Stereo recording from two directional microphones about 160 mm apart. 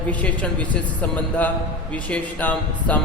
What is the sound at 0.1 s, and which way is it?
A man's voice, 10° left (ahead or behind).